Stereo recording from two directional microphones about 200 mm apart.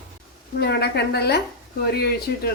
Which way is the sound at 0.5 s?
55° left (ahead or behind).